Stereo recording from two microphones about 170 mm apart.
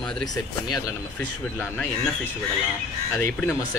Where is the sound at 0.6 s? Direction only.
25° left (ahead or behind).